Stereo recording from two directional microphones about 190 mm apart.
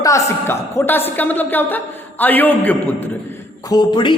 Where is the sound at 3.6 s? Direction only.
20° left (ahead or behind).